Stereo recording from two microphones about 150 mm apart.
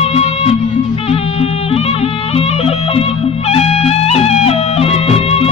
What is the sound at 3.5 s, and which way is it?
Music, 45° left (ahead or behind).